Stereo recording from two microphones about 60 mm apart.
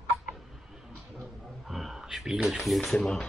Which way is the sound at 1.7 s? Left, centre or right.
Centre.